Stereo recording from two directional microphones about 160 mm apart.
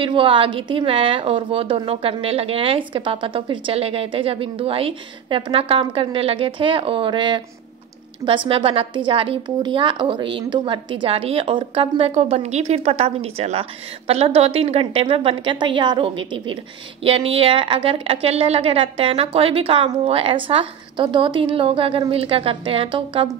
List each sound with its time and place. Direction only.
0.0 s a woman's voice: 30° right (ahead or behind)
8.5 s a woman's voice: 35° right (ahead or behind)